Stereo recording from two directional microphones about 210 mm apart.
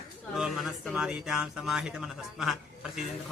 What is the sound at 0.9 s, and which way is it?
Speech, 5° right (ahead or behind).